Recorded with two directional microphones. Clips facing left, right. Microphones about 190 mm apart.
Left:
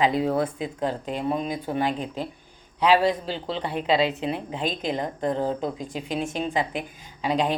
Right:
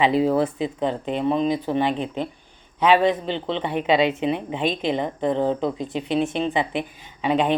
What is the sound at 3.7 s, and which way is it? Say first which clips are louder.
Speech: right 3 dB; 65° right (ahead or behind).